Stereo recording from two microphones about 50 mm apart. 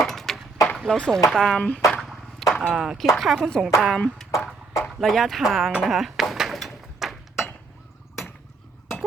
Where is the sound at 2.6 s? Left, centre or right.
Centre.